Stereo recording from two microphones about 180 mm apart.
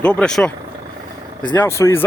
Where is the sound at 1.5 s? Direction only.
15° left (ahead or behind).